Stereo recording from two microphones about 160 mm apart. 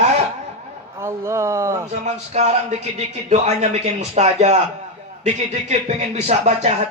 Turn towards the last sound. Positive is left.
turn(degrees=-45)  # may be behind; listen again after turning